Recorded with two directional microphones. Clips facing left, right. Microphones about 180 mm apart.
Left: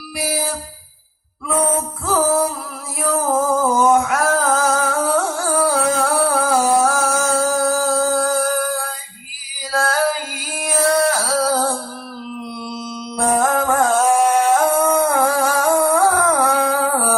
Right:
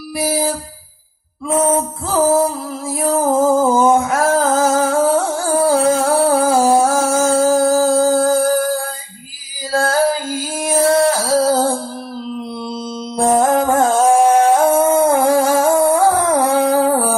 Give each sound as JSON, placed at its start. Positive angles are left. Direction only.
{"t": 0.2, "sound": "music", "side_deg": -30}
{"t": 2.0, "sound": "music", "side_deg": -25}
{"t": 3.1, "sound": "a sound", "side_deg": -25}
{"t": 9.7, "sound": "music", "side_deg": -25}